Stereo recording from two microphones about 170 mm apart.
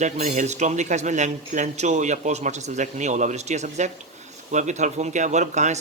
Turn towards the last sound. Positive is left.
turn(degrees=-45)  # may be behind; listen again after turning